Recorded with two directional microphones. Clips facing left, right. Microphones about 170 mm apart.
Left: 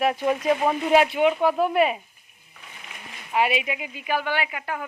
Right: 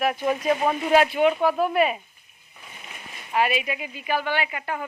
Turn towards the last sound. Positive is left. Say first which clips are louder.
# right 1 dB
turn(degrees=5)  # may be behind; listen again after turning